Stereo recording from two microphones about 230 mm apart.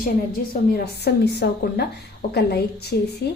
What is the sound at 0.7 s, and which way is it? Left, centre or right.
A woman's voice, left.